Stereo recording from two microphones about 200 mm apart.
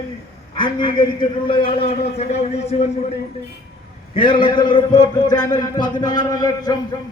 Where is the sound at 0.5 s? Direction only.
25° left (ahead or behind).